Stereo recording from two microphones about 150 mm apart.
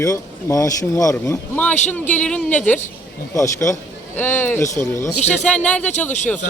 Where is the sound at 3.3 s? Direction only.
20° left (ahead or behind).